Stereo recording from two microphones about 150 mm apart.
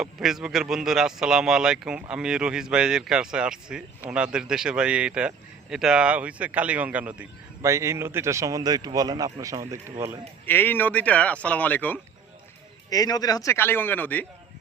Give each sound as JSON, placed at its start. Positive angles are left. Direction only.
{"t": 0.0, "sound": "speech", "side_deg": -5}
{"t": 10.4, "sound": "speech", "side_deg": 15}
{"t": 12.9, "sound": "speech", "side_deg": 25}